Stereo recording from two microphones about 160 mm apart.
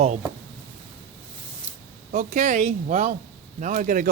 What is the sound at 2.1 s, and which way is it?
Speech, 50° right (ahead or behind).